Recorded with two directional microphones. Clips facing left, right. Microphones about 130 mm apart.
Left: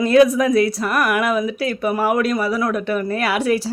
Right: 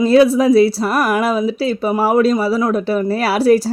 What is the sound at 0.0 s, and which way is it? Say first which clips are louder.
Speech: right 3 dB; 30° right (ahead or behind).